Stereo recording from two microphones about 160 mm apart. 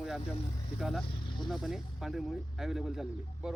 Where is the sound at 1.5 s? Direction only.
Centre (ahead or behind).